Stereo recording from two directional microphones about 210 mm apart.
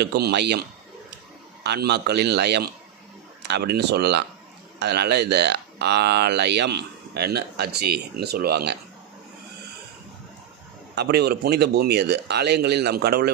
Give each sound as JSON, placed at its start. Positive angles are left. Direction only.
{"t": 0.0, "sound": "speech", "side_deg": -50}
{"t": 11.0, "sound": "speech", "side_deg": -50}